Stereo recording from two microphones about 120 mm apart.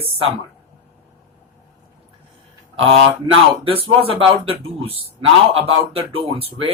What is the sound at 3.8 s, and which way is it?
Speech, 50° right (ahead or behind).